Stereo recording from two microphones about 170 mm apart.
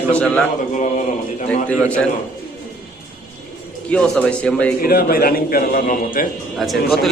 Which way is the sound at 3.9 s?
5° left (ahead or behind).